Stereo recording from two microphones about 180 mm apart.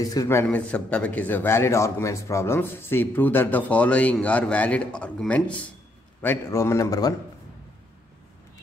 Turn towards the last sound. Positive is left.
turn(degrees=20)  # may be behind; listen again after turning